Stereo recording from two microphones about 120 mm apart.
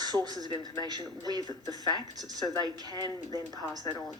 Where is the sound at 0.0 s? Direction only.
35° right (ahead or behind).